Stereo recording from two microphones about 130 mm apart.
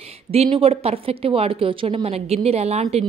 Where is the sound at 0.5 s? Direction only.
50° right (ahead or behind).